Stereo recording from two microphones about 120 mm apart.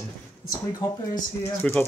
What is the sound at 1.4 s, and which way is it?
Speech, 15° left (ahead or behind).